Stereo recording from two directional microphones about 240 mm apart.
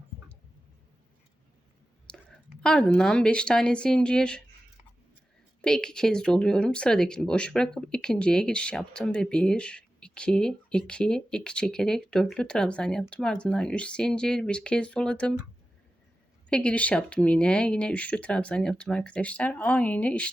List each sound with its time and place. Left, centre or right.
2.0 s speech: centre
5.6 s speech: centre
16.5 s speech: centre